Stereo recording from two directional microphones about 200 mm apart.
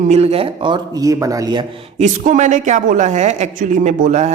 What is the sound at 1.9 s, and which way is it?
Speech, 35° right (ahead or behind).